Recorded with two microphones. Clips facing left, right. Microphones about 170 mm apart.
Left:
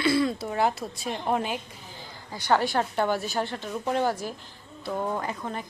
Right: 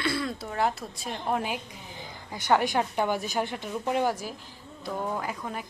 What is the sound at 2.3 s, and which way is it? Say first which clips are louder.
A woman's voice: even; 20° right (ahead or behind).